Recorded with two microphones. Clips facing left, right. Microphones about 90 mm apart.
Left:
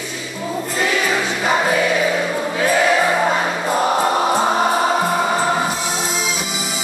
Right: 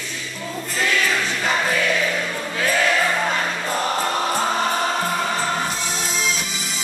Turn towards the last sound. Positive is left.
turn(degrees=15)  # may be behind; listen again after turning